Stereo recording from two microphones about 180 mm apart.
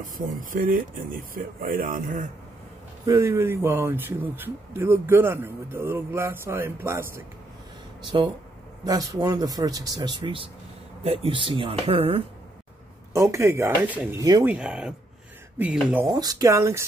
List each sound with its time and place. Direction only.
0.0 s speech: 50° right (ahead or behind)
3.1 s a man's voice: 15° right (ahead or behind); by 12.2 s 30° right (ahead or behind)
13.1 s speech: 15° right (ahead or behind)
16.1 s speech: 20° right (ahead or behind)